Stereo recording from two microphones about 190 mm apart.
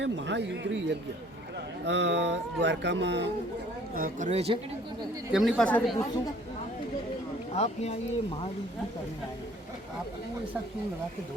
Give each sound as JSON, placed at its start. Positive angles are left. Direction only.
{"t": 0.0, "sound": "speech", "side_deg": -70}
{"t": 3.9, "sound": "speech", "side_deg": -45}
{"t": 5.3, "sound": "speech", "side_deg": 0}
{"t": 7.5, "sound": "speech", "side_deg": 35}